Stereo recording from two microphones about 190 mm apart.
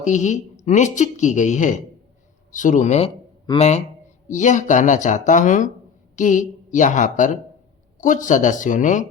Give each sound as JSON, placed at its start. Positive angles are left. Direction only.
{"t": 0.0, "sound": "speech", "side_deg": 40}
{"t": 4.3, "sound": "speech", "side_deg": 40}